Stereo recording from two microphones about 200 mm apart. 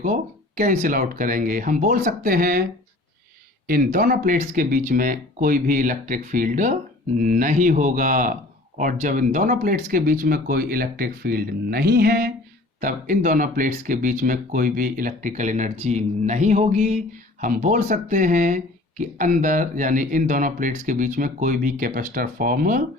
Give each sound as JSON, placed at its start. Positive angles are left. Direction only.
{"t": 0.0, "sound": "speech", "side_deg": -40}
{"t": 3.9, "sound": "speech", "side_deg": -45}